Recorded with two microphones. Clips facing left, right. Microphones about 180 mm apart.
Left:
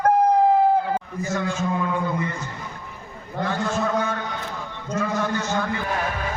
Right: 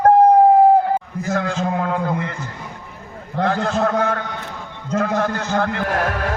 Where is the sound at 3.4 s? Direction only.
60° right (ahead or behind); by 6.3 s 80° right.